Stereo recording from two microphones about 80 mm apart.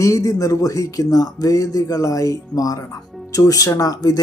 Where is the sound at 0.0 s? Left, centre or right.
Left.